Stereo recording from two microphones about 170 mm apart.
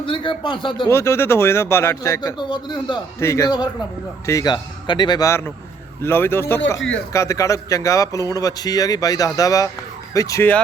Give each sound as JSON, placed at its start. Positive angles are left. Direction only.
{"t": 0.0, "sound": "a man's voice", "side_deg": 30}
{"t": 0.9, "sound": "a man's voice", "side_deg": 15}
{"t": 6.7, "sound": "speech", "side_deg": 90}
{"t": 7.1, "sound": "a man's voice", "side_deg": 20}